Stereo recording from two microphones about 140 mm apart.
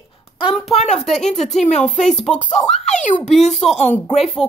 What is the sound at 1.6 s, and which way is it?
Speech, 60° left (ahead or behind).